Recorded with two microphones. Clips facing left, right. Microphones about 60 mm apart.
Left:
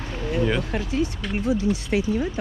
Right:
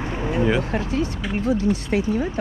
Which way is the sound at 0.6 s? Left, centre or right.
Right.